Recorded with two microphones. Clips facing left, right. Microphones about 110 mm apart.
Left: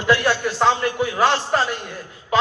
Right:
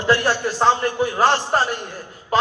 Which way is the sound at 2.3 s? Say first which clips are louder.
Right 1 dB; 40° right (ahead or behind).